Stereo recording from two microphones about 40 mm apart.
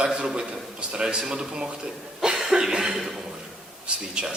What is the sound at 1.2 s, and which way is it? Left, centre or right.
Speech, centre.